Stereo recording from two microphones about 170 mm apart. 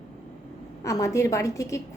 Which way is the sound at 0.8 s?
20° left (ahead or behind).